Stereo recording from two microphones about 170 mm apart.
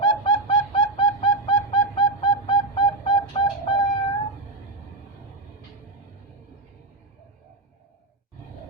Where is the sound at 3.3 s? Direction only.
25° left (ahead or behind).